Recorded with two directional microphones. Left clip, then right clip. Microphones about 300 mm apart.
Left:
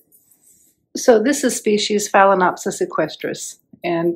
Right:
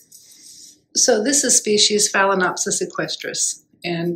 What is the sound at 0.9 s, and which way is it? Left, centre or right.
Speech, left.